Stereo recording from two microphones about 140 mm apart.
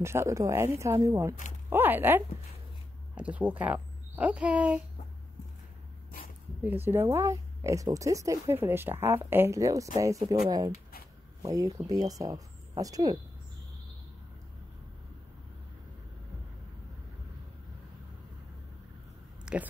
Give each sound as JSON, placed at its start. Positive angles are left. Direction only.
{"t": 0.0, "sound": "speech", "side_deg": -20}
{"t": 6.6, "sound": "speech", "side_deg": -15}
{"t": 19.5, "sound": "speech", "side_deg": -5}